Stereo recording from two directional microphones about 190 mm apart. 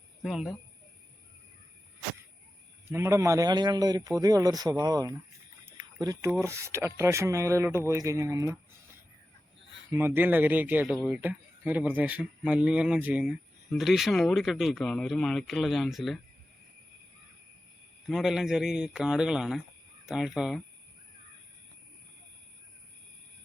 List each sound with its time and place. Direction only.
0.2 s speech: centre (ahead or behind)
2.9 s a man's voice: 15° right (ahead or behind)
5.6 s a sound: 15° right (ahead or behind)
6.4 s speech: 15° right (ahead or behind)
10.2 s speech: 10° right (ahead or behind)
18.0 s speech: centre (ahead or behind)